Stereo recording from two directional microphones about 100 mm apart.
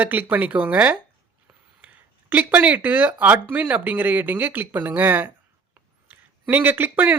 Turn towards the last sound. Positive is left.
turn(degrees=-20)  # may be behind; listen again after turning